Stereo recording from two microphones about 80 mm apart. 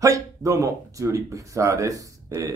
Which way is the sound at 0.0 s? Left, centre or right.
Right.